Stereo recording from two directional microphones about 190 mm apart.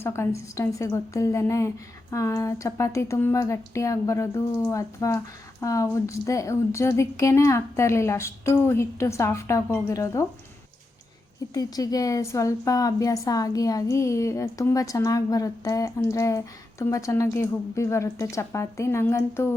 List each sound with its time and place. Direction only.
0.0 s a woman's voice: 15° left (ahead or behind)
11.5 s a woman's voice: 20° left (ahead or behind)